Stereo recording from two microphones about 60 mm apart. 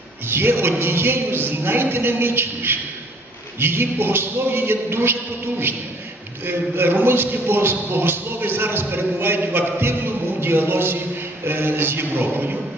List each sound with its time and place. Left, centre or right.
0.3 s speech: right
6.4 s a man's voice: right